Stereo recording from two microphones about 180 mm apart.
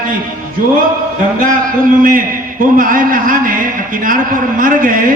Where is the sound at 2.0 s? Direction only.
50° right (ahead or behind).